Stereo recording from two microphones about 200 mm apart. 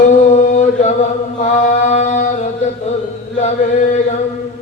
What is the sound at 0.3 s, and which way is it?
Chant, 35° left (ahead or behind).